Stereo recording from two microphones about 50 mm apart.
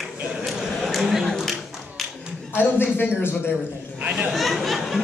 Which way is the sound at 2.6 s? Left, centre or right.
Left.